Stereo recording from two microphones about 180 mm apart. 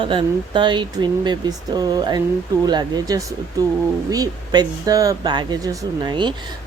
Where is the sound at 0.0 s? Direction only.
25° right (ahead or behind).